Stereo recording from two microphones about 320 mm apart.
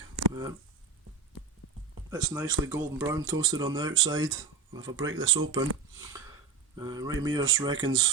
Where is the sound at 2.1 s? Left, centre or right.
Centre.